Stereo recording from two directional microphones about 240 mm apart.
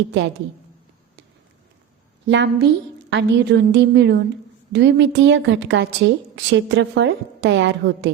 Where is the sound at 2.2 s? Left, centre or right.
Right.